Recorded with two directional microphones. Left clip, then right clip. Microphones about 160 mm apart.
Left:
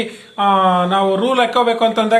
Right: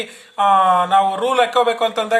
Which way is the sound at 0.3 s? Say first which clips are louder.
Even; 40° right (ahead or behind).